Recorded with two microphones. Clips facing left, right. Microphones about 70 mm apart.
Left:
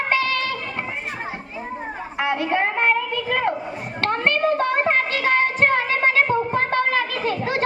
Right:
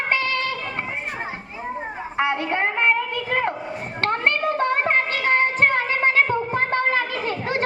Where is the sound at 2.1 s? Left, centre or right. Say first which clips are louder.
Right 1 dB; right.